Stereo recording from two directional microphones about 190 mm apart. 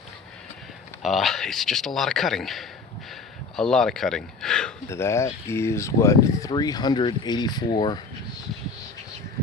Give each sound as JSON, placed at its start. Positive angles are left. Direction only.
{"t": 1.0, "sound": "a man's voice", "side_deg": 0}
{"t": 4.9, "sound": "speech", "side_deg": 15}